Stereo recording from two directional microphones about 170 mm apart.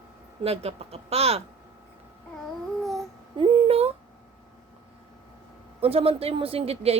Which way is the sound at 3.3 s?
35° right (ahead or behind).